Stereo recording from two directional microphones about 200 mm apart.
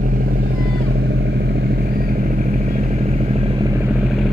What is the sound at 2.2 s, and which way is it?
Motorcycle, 40° right (ahead or behind).